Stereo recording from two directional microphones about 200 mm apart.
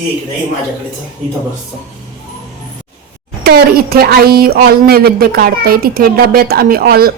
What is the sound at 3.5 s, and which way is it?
Speech, 50° right (ahead or behind).